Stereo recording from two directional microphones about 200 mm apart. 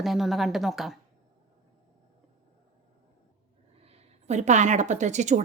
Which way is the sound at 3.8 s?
35° right (ahead or behind).